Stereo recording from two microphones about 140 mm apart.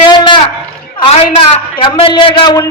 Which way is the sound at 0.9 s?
40° left (ahead or behind).